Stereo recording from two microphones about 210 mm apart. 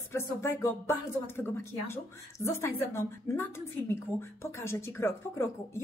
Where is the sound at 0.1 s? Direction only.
10° left (ahead or behind).